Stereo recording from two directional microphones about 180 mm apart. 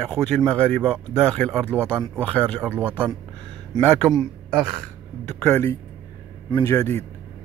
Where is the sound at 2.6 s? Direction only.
5° right (ahead or behind).